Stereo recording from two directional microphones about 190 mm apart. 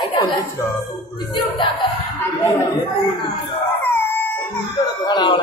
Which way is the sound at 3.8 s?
10° left (ahead or behind).